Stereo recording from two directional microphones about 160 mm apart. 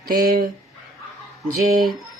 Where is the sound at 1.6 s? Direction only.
60° right (ahead or behind).